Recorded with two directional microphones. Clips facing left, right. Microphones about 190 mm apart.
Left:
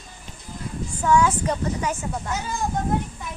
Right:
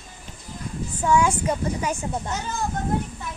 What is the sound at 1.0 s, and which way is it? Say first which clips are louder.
Speech: left 1 dB; 10° right (ahead or behind).